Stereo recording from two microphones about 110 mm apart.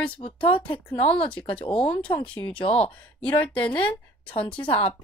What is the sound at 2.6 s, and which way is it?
Speech, 60° left (ahead or behind).